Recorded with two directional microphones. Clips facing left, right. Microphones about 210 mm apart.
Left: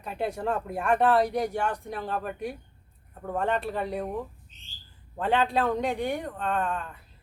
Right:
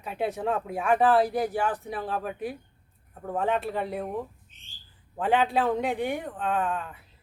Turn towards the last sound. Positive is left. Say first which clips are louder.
# right 1 dB
turn(degrees=0)  # may be behind; listen again after turning